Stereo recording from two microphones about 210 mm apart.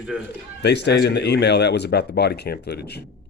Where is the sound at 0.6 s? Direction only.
55° left (ahead or behind).